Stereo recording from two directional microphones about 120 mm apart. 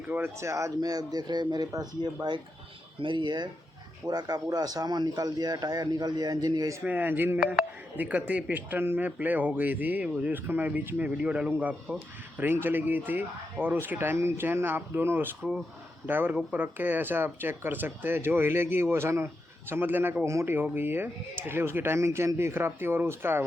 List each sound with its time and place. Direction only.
0.1 s speech: 20° right (ahead or behind)
3.0 s speech: 40° right (ahead or behind)
6.8 s speech: 15° right (ahead or behind)